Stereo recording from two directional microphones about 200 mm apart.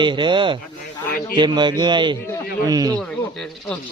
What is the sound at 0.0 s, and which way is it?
Speech, 25° right (ahead or behind).